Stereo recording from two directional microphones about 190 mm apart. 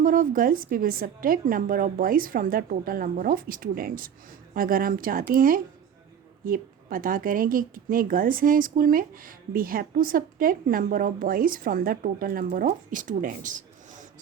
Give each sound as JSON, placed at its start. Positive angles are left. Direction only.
{"t": 0.0, "sound": "a woman's voice", "side_deg": -45}